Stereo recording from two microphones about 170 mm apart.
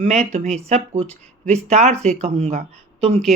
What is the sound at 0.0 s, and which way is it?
Speech, 40° right (ahead or behind).